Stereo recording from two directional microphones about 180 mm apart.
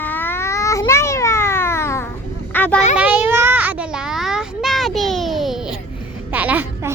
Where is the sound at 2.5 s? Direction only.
10° left (ahead or behind).